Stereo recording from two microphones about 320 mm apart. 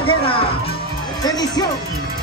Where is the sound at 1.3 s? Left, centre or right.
Centre.